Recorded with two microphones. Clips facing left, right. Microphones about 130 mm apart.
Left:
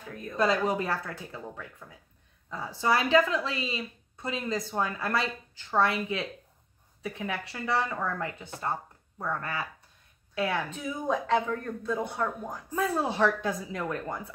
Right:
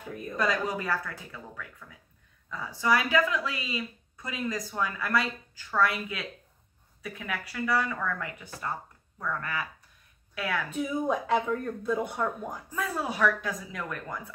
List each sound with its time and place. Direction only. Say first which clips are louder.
0.1 s speech: right 2 dB; 10° right (ahead or behind)
0.4 s speech: left 3 dB; 30° left (ahead or behind)
10.8 s speech: right 2 dB; 10° right (ahead or behind)
12.7 s speech: left 4 dB; 30° left (ahead or behind)